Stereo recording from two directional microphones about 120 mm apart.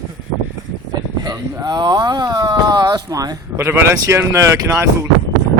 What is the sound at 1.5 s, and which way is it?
Speech, 35° right (ahead or behind).